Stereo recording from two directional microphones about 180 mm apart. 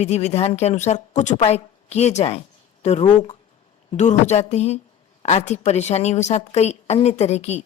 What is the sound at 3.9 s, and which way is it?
Speech, 40° left (ahead or behind).